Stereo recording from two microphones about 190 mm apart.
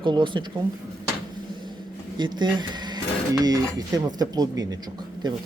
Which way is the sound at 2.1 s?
25° right (ahead or behind).